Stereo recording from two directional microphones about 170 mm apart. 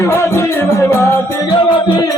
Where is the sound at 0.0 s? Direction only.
15° left (ahead or behind).